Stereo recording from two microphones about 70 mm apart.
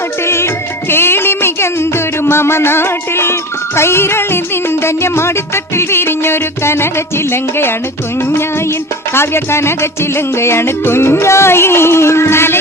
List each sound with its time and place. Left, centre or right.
0.3 s music: left
9.1 s music: left